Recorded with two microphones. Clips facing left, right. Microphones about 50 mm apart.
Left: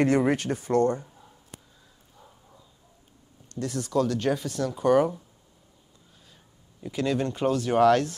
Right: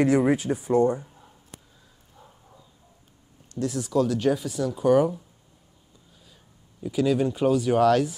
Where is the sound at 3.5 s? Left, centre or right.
Centre.